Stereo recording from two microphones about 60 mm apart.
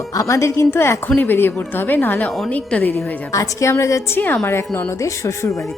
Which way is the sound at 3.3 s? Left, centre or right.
Left.